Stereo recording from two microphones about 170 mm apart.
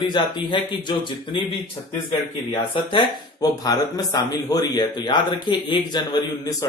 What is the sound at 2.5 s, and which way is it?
Speech, 30° left (ahead or behind).